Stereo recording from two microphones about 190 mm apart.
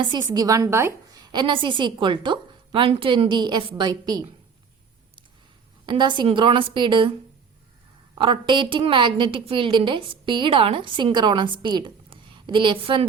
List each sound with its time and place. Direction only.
0.0 s a woman's voice: 20° right (ahead or behind)
5.8 s a woman's voice: 25° right (ahead or behind)
8.2 s a woman's voice: 25° right (ahead or behind)